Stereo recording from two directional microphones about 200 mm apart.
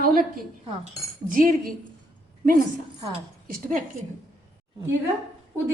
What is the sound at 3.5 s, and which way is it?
Speech, 45° right (ahead or behind).